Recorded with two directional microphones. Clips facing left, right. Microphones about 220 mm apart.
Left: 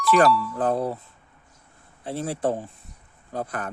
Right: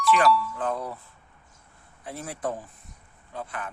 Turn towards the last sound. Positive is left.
turn(degrees=40)  # may be behind; listen again after turning